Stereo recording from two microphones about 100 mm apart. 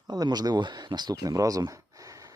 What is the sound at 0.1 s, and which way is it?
Speech, 45° right (ahead or behind).